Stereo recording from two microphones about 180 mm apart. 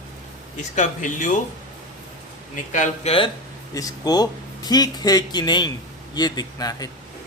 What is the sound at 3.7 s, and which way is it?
Speech, 20° left (ahead or behind).